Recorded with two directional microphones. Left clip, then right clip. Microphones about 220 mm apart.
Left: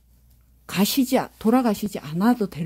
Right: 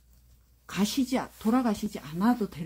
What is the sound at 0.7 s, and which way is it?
Speech, 55° left (ahead or behind).